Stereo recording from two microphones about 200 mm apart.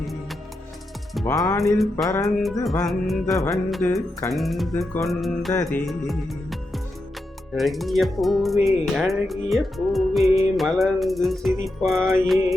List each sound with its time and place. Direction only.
0.0 s music: centre (ahead or behind)
1.2 s music: 20° left (ahead or behind)
1.6 s music: centre (ahead or behind)
2.0 s music: 15° left (ahead or behind)
2.8 s music: centre (ahead or behind)